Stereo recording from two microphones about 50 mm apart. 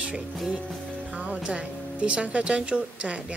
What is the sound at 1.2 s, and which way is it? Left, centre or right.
Speech, right.